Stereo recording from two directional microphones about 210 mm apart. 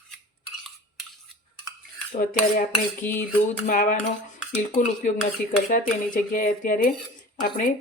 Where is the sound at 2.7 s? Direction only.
10° left (ahead or behind).